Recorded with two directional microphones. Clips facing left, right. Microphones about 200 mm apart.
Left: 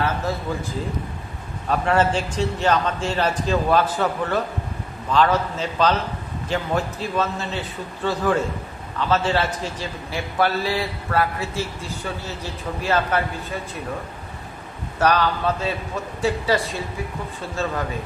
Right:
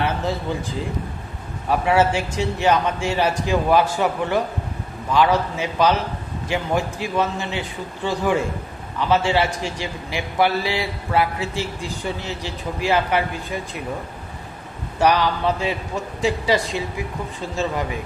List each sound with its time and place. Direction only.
1.7 s a man's voice: 10° right (ahead or behind)
15.0 s a man's voice: 15° right (ahead or behind)